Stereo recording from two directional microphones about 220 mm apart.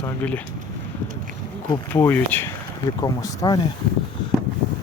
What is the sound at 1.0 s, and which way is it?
Speech, 40° right (ahead or behind).